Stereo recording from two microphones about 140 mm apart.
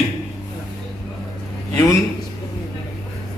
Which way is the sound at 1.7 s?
20° left (ahead or behind).